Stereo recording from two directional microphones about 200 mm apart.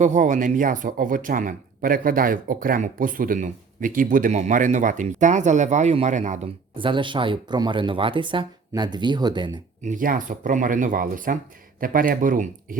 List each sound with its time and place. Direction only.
0.0 s speech: 40° right (ahead or behind)
6.7 s speech: 25° right (ahead or behind)
9.8 s speech: 40° right (ahead or behind)